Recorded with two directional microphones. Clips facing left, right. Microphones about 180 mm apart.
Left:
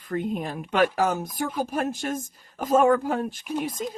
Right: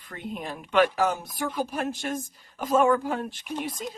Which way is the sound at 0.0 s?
45° left (ahead or behind).